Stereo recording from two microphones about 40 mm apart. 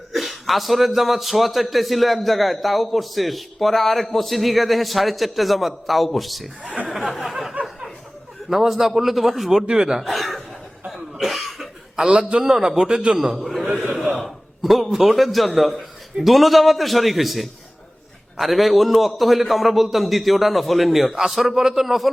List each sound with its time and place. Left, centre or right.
0.1 s a man's voice: centre
10.0 s chuckle: centre
10.9 s cough: centre
12.0 s a man's voice: right
12.4 s a man's voice: centre
13.7 s gasp: centre
14.3 s a sound: centre
14.8 s a man's voice: centre